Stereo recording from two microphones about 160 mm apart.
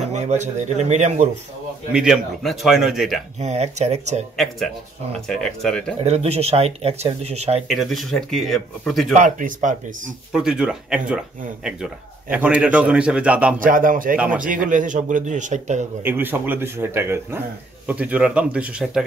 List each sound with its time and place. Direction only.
0.0 s speech: 45° right (ahead or behind)
1.9 s speech: 5° right (ahead or behind)
3.3 s a man's voice: 45° right (ahead or behind)
5.3 s speech: 5° left (ahead or behind)
6.0 s speech: 40° right (ahead or behind)
7.6 s speech: centre (ahead or behind)
9.1 s a man's voice: 50° right (ahead or behind)
10.3 s speech: 5° right (ahead or behind)
13.6 s a man's voice: 60° right (ahead or behind)
14.1 s a man's voice: 10° right (ahead or behind)
14.7 s a man's voice: 55° right (ahead or behind)
16.0 s a man's voice: 10° right (ahead or behind)